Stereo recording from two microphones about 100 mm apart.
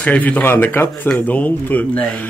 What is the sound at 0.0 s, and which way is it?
Speech, 15° left (ahead or behind).